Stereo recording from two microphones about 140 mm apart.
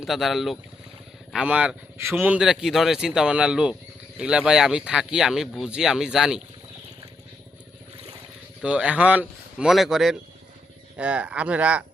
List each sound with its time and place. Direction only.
0.0 s speech: centre (ahead or behind)
8.6 s speech: 10° right (ahead or behind)